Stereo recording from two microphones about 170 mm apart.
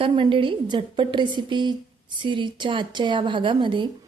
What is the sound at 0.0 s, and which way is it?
Speech, 30° right (ahead or behind).